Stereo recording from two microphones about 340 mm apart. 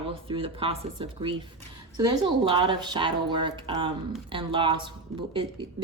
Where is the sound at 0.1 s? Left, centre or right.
Centre.